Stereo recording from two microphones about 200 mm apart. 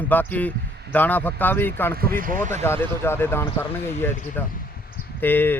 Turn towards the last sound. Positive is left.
turn(degrees=10)  # may be behind; listen again after turning